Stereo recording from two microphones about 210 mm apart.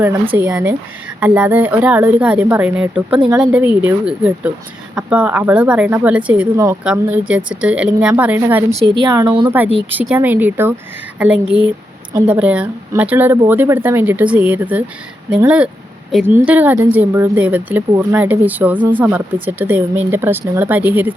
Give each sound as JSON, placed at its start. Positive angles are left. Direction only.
{"t": 0.3, "sound": "speech", "side_deg": -10}
{"t": 9.0, "sound": "a woman's voice", "side_deg": -20}
{"t": 9.9, "sound": "speech", "side_deg": -5}